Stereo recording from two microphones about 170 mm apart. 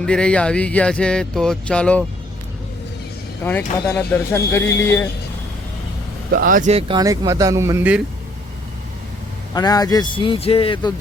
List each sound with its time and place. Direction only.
0.0 s speech: 5° left (ahead or behind)
3.4 s speech: 10° left (ahead or behind)
6.3 s speech: 55° right (ahead or behind); by 8.0 s 10° right (ahead or behind)
9.6 s a man's voice: 20° left (ahead or behind)